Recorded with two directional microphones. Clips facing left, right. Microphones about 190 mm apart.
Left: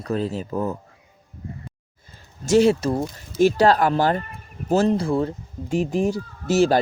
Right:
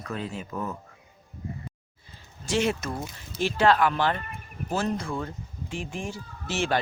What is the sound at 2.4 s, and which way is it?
Speech, 35° left (ahead or behind).